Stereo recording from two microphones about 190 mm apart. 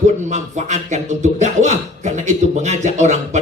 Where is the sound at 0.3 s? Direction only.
40° right (ahead or behind).